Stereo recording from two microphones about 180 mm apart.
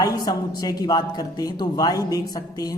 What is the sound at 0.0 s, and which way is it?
Speech, 20° left (ahead or behind).